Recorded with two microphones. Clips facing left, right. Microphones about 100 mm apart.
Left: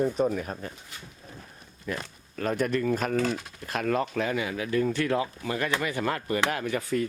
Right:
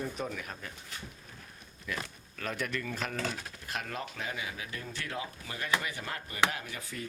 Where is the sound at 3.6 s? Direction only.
70° left (ahead or behind).